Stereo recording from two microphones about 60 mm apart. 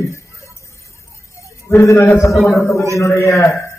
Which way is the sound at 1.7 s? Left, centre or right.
Left.